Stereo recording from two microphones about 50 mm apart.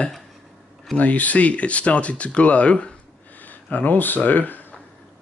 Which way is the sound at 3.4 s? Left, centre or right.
Left.